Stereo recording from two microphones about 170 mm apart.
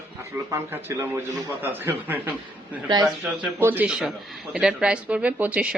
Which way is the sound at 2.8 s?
25° right (ahead or behind).